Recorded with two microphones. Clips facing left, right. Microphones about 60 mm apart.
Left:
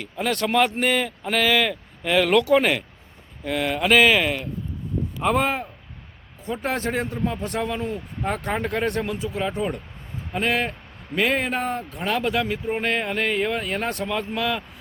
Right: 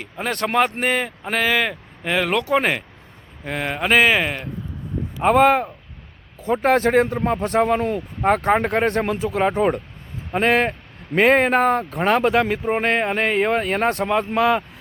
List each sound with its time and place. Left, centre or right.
0.0 s speech: right
5.2 s speech: right
7.9 s speech: right
11.9 s speech: right